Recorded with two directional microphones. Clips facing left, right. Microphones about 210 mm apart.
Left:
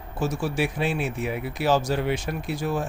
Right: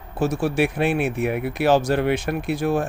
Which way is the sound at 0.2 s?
60° right (ahead or behind).